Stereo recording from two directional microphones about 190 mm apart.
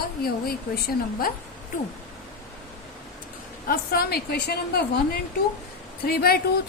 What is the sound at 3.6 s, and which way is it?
A woman's voice, 50° left (ahead or behind).